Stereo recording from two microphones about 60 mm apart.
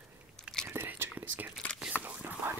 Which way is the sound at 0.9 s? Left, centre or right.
Right.